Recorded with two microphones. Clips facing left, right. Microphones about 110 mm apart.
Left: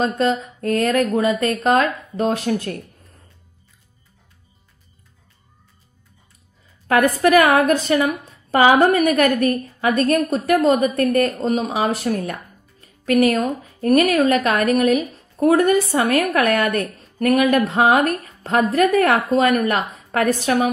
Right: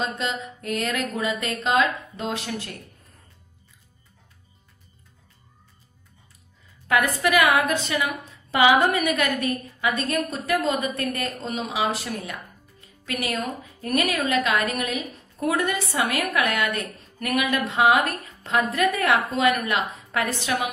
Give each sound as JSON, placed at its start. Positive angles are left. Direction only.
{"t": 0.0, "sound": "a woman's voice", "side_deg": 40}
{"t": 6.9, "sound": "a woman's voice", "side_deg": 45}
{"t": 10.3, "sound": "a woman's voice", "side_deg": 35}